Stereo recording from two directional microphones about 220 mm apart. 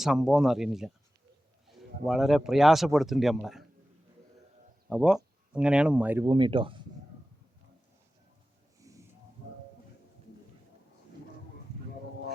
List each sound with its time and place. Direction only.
0.0 s speech: centre (ahead or behind)
4.9 s speech: 5° right (ahead or behind)
6.2 s speech: 20° right (ahead or behind)
8.8 s a sound: 15° right (ahead or behind)